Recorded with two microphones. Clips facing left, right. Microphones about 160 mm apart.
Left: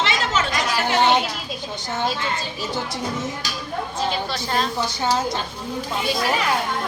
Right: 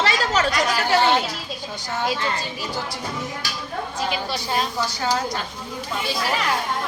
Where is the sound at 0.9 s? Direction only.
20° left (ahead or behind).